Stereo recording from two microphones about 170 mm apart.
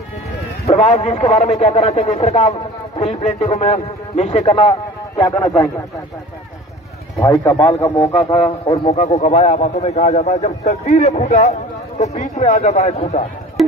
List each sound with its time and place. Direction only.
0.7 s speech: 40° left (ahead or behind)
7.2 s speech: 20° left (ahead or behind)
8.6 s speech: 35° left (ahead or behind)
13.6 s music: centre (ahead or behind)